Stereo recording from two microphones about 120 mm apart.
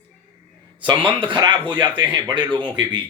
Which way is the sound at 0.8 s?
40° right (ahead or behind).